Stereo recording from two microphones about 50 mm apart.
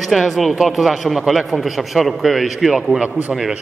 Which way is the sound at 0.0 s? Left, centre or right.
Centre.